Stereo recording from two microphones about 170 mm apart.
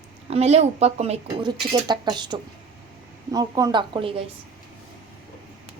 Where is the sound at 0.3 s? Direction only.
40° right (ahead or behind).